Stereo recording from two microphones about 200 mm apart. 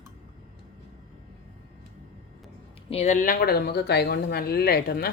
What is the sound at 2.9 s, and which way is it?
Speech, 35° left (ahead or behind).